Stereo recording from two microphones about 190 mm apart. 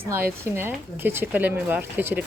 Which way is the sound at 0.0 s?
10° right (ahead or behind).